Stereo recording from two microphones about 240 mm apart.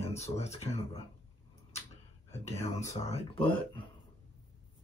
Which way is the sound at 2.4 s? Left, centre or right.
Left.